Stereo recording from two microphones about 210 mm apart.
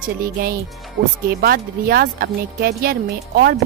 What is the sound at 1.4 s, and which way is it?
Speech, 45° right (ahead or behind).